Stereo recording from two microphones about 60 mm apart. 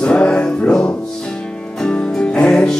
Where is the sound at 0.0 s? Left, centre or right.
Centre.